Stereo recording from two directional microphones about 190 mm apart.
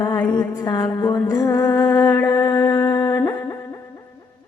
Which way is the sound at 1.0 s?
20° left (ahead or behind).